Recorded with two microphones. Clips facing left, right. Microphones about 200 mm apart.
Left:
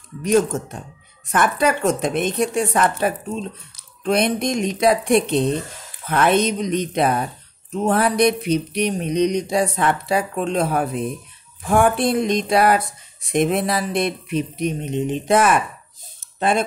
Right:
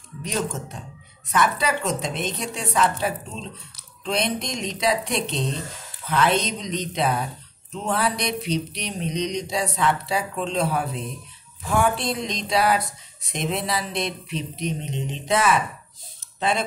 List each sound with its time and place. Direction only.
0.2 s speech: 50° left (ahead or behind)
4.0 s speech: 55° left (ahead or behind)